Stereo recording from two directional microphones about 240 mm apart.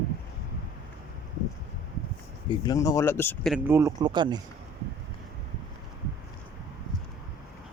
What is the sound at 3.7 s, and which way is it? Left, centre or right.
Speech, centre.